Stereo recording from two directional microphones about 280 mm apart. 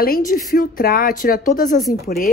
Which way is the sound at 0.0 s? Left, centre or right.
Left.